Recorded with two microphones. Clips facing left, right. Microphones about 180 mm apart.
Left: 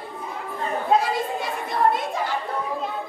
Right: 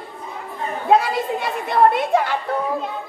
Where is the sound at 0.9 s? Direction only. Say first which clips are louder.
Right 5 dB; 65° right (ahead or behind).